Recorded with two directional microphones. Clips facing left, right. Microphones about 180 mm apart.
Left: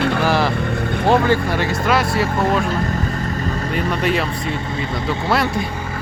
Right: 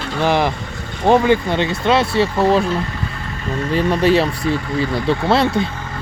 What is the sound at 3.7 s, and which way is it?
Speech, 30° right (ahead or behind).